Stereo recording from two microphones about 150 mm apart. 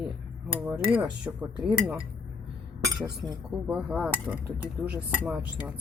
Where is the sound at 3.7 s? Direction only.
10° right (ahead or behind).